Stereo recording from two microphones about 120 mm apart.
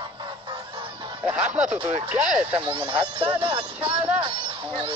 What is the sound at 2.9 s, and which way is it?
Speech, 45° right (ahead or behind).